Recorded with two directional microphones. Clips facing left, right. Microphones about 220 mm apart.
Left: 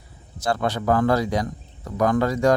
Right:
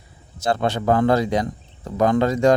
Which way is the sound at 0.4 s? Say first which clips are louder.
Right 2 dB; 25° right (ahead or behind).